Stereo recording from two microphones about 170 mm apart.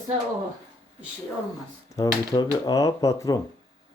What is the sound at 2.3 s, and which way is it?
Speech, 25° left (ahead or behind).